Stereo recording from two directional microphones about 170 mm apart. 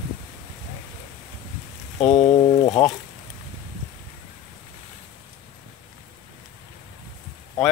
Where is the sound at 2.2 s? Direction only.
30° left (ahead or behind).